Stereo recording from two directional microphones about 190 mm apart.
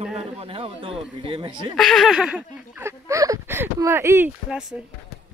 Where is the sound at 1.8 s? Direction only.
Centre (ahead or behind).